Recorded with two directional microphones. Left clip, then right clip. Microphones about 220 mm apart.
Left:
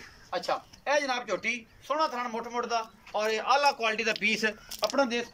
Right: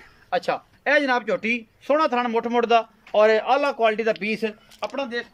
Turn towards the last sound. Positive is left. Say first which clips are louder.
# even
turn(degrees=5)  # may be behind; listen again after turning